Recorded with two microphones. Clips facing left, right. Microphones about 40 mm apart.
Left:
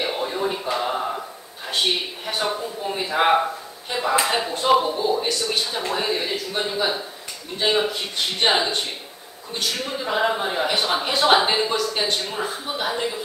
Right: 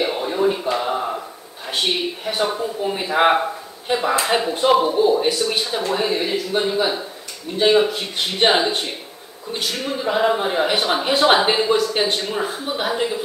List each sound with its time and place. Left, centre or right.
0.0 s a sound: centre
1.7 s speech: centre
4.3 s speech: centre
4.8 s speech: centre